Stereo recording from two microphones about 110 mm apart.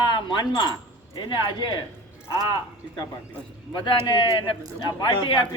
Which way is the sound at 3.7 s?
45° left (ahead or behind).